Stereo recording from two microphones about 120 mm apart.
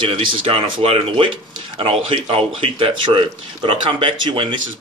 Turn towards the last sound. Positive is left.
turn(degrees=-45)  # may be behind; listen again after turning